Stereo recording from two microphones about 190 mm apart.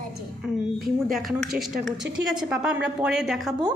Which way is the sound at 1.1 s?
Centre (ahead or behind).